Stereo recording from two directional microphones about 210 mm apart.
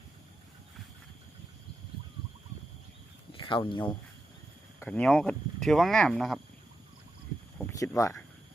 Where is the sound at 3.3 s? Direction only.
25° left (ahead or behind).